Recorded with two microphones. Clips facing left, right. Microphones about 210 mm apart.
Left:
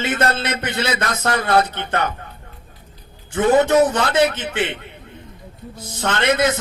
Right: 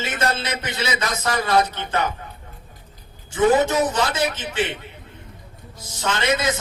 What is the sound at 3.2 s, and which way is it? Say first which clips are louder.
A man's voice: left 2 dB; 60° left (ahead or behind).